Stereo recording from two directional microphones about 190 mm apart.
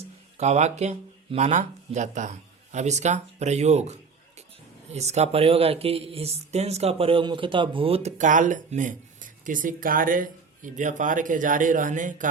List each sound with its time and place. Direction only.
0.3 s speech: 35° right (ahead or behind)